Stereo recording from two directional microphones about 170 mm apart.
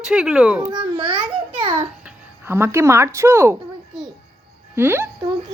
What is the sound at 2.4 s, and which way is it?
Speech, 15° right (ahead or behind).